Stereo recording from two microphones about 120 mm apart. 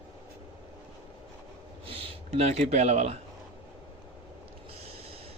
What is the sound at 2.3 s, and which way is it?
Speech, 65° right (ahead or behind).